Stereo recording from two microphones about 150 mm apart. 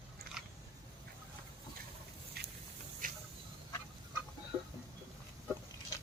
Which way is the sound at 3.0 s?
65° right (ahead or behind).